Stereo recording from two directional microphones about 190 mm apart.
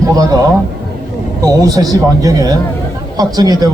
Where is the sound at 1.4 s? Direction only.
20° right (ahead or behind).